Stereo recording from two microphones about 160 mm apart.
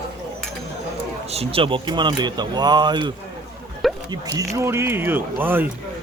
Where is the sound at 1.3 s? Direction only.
40° right (ahead or behind).